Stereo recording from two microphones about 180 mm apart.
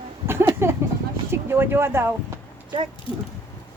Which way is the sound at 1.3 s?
15° right (ahead or behind).